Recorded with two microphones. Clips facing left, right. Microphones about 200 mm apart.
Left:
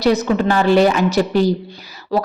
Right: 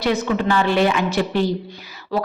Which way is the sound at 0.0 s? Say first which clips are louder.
Left 4 dB; 40° left (ahead or behind).